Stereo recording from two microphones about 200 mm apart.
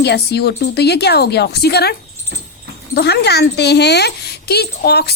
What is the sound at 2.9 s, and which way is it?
Speech, 55° left (ahead or behind).